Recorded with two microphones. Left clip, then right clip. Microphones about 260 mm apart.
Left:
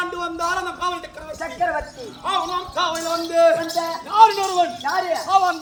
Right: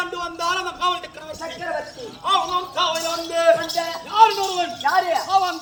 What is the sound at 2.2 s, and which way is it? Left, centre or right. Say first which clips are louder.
Speech: right 3 dB; centre.